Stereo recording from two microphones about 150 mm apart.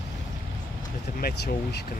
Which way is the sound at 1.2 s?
90° left.